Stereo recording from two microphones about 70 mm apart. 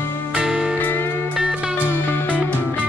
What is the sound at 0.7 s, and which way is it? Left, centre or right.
Music, left.